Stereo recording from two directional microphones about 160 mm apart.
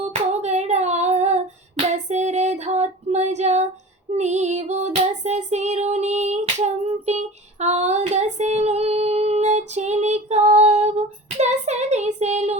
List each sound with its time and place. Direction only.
0.0 s female singing: 45° right (ahead or behind)
4.1 s child singing: 45° right (ahead or behind)